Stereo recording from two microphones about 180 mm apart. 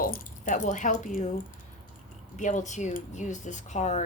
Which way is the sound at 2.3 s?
45° left (ahead or behind).